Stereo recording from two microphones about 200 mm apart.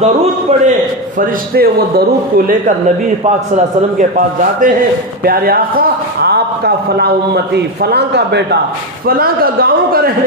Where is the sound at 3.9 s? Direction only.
40° right (ahead or behind).